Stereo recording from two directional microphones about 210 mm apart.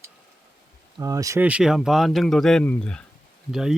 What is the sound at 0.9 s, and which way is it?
Speech, 15° right (ahead or behind).